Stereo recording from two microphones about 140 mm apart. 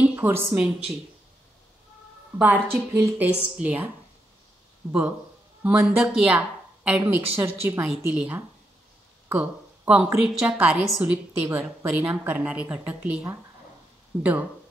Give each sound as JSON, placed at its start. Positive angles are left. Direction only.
{"t": 0.0, "sound": "a woman's voice", "side_deg": -15}
{"t": 2.3, "sound": "a woman's voice", "side_deg": -10}
{"t": 5.6, "sound": "a woman's voice", "side_deg": -10}